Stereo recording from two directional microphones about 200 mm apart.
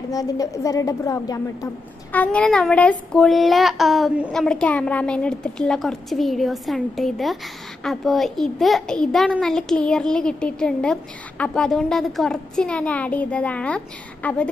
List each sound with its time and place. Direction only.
0.1 s a woman's voice: 15° left (ahead or behind)
2.1 s a child's voice: 5° left (ahead or behind)